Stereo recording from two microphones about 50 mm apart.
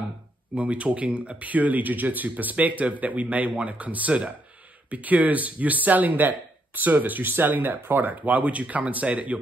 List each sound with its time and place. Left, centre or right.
0.6 s a man's voice: right